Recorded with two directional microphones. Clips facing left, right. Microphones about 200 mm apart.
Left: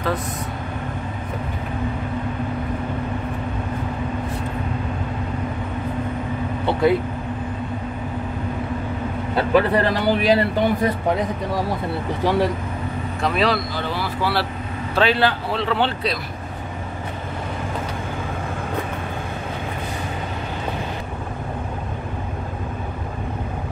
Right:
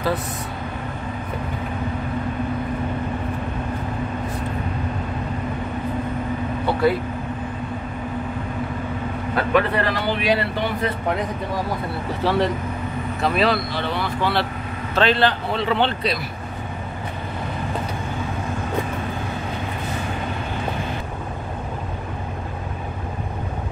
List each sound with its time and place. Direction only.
6.6 s vehicle: 20° left (ahead or behind)
9.3 s speech: 30° left (ahead or behind)
12.2 s a man's voice: 15° left (ahead or behind)
13.2 s a man's voice: centre (ahead or behind)